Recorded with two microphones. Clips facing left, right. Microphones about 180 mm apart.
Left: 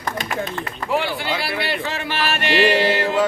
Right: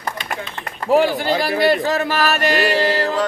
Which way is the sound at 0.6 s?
40° right (ahead or behind).